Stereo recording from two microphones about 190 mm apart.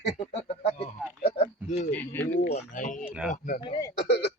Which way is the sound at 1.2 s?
35° left (ahead or behind).